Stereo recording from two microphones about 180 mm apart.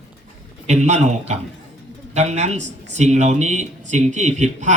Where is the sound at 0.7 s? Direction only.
40° right (ahead or behind).